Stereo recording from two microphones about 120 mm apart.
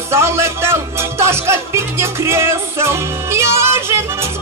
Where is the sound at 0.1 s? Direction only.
20° right (ahead or behind).